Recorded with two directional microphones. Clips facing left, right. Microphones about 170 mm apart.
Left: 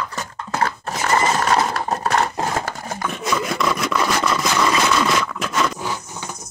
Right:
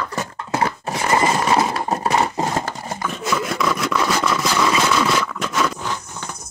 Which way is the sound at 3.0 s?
Centre (ahead or behind).